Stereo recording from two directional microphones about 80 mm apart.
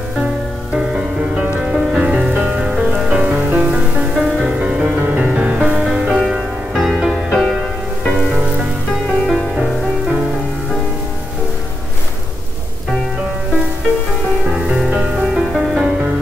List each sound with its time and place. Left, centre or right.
0.7 s music: centre
4.1 s music: centre
4.5 s music: centre
9.0 s music: centre
14.9 s music: centre